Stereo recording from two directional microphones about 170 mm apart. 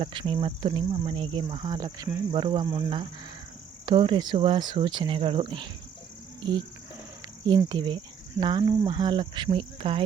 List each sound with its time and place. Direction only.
0.0 s cricket: 30° right (ahead or behind)